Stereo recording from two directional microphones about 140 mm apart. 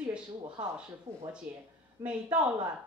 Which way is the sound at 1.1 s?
20° right (ahead or behind).